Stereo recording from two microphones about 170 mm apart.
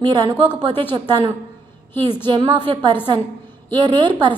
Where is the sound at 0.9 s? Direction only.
25° right (ahead or behind).